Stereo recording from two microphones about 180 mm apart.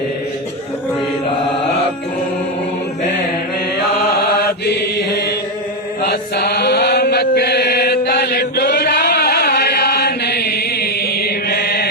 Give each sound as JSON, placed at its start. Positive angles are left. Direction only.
{"t": 4.6, "sound": "mantra", "side_deg": 65}
{"t": 6.0, "sound": "chant", "side_deg": 60}